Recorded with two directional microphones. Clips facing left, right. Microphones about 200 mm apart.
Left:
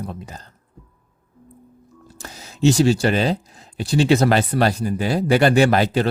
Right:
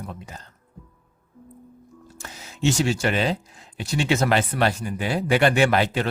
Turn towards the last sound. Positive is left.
turn(degrees=40)  # may be behind; listen again after turning